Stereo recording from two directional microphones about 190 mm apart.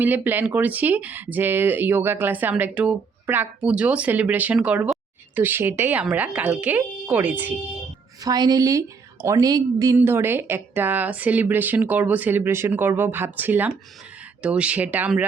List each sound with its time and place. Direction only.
0.0 s speech: 10° right (ahead or behind)
8.2 s a woman's voice: 20° right (ahead or behind)